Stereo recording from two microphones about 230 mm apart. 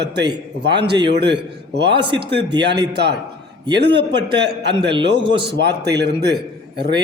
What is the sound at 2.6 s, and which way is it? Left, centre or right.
Speech, right.